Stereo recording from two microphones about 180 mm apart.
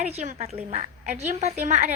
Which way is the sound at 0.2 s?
40° right (ahead or behind).